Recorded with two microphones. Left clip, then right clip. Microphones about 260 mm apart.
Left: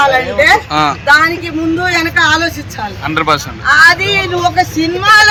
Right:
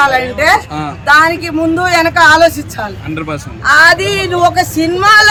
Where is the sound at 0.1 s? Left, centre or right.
Centre.